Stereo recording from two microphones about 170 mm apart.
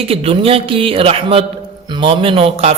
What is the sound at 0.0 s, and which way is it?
A man's voice, 35° right (ahead or behind).